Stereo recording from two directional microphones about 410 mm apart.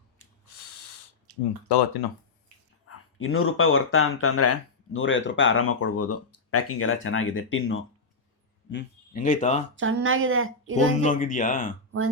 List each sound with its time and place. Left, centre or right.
1.6 s speech: left
2.8 s speech: left
9.7 s speech: right
11.0 s speech: centre